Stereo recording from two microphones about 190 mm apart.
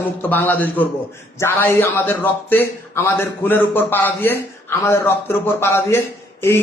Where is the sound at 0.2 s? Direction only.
10° left (ahead or behind).